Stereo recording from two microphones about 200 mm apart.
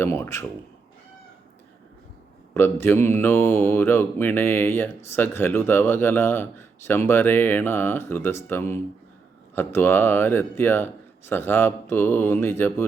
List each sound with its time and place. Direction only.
0.0 s speech: 15° left (ahead or behind)
2.5 s speech: 10° left (ahead or behind)